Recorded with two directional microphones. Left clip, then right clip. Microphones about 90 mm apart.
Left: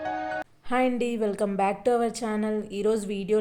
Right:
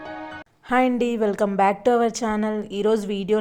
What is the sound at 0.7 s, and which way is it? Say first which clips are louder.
A woman's voice: right 5 dB; 45° right (ahead or behind).